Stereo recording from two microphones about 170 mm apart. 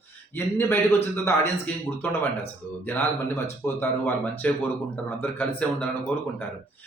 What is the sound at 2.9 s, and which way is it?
A man's voice, 10° left (ahead or behind).